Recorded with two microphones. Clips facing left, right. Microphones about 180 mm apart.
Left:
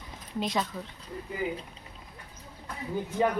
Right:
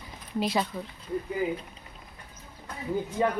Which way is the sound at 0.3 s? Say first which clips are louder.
Right 3 dB; 5° right (ahead or behind).